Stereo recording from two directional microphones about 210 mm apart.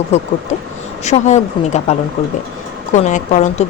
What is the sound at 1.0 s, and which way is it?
Speech, 35° left (ahead or behind).